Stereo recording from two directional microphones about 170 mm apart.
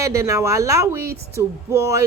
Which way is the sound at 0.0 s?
20° right (ahead or behind).